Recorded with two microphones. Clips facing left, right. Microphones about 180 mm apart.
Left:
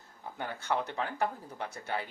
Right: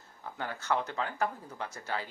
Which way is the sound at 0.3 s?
15° left (ahead or behind).